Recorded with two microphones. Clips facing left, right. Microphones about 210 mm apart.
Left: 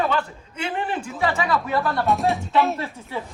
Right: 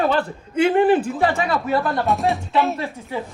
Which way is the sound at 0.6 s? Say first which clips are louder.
Right 12 dB; 45° right (ahead or behind).